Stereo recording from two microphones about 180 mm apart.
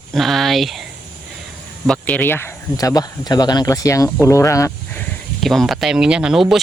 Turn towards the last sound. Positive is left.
turn(degrees=-5)  # may be behind; listen again after turning